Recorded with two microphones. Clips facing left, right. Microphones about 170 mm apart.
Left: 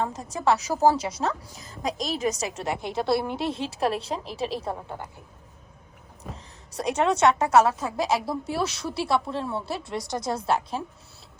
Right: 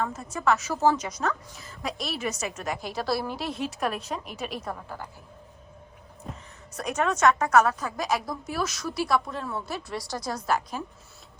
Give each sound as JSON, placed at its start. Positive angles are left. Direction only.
{"t": 0.0, "sound": "a woman's voice", "side_deg": 35}
{"t": 2.7, "sound": "speech", "side_deg": 25}
{"t": 6.3, "sound": "a woman's voice", "side_deg": 30}